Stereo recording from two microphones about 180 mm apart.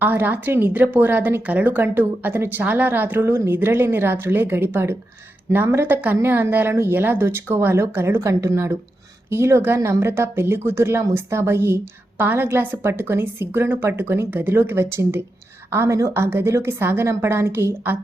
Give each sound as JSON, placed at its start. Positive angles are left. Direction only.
{"t": 0.0, "sound": "speech", "side_deg": -10}